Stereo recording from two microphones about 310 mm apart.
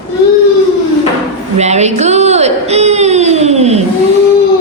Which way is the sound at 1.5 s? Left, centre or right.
Right.